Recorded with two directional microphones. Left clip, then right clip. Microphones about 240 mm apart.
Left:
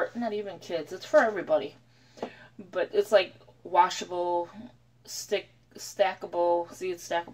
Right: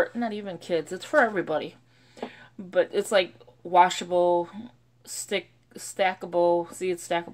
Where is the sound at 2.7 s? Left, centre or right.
Right.